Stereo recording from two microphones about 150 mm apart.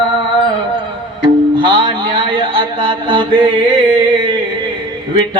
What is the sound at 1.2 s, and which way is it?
Music, 30° right (ahead or behind).